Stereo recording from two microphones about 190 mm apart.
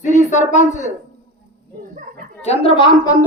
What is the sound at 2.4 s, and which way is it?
Speech, 30° left (ahead or behind).